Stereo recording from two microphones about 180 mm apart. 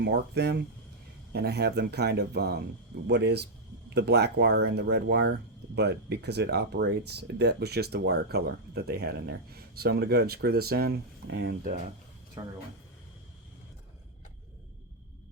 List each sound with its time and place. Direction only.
0.0 s speech: 70° right (ahead or behind)
12.4 s speech: 15° right (ahead or behind)